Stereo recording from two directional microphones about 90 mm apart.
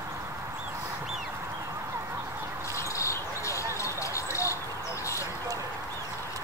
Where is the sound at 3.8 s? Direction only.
35° left (ahead or behind).